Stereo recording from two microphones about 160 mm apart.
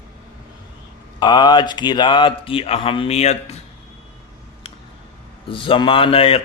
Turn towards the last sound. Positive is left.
turn(degrees=35)  # may be behind; listen again after turning